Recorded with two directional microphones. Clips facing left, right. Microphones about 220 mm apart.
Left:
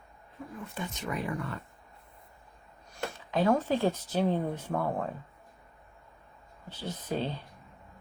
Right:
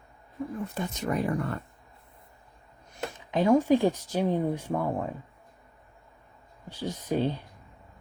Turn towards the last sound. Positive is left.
turn(degrees=-10)  # may be behind; listen again after turning